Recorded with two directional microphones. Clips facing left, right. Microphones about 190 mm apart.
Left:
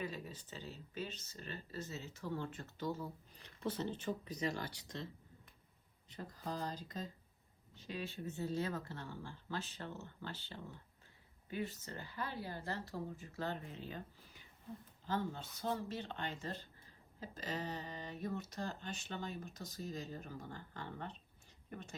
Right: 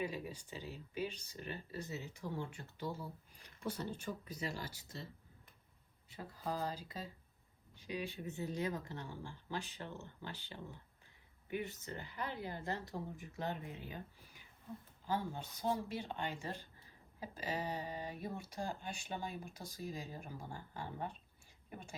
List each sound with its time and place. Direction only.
0.0 s speech: 15° right (ahead or behind)
3.6 s speech: 25° left (ahead or behind)
4.4 s speech: 40° left (ahead or behind)
6.1 s speech: 10° right (ahead or behind)